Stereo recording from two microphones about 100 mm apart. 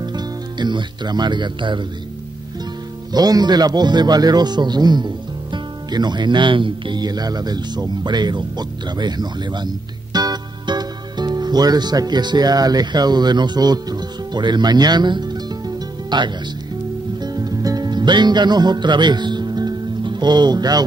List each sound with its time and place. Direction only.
0.0 s speech: 45° right (ahead or behind)
3.1 s speech: 40° right (ahead or behind)
10.1 s music: 45° right (ahead or behind)